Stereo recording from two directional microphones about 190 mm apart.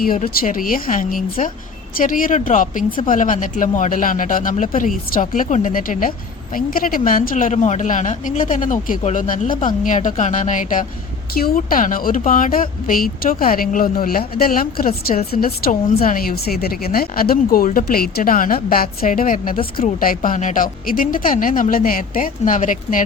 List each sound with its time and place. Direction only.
0.0 s speech: 50° left (ahead or behind)